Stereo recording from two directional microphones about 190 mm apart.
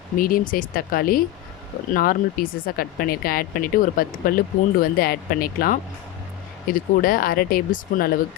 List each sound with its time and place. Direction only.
0.2 s speech: 45° left (ahead or behind)